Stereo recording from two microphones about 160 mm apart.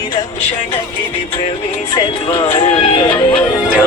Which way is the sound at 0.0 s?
25° left (ahead or behind).